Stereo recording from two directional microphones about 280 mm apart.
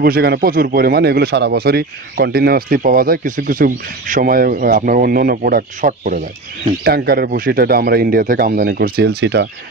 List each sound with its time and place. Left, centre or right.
0.0 s speech: right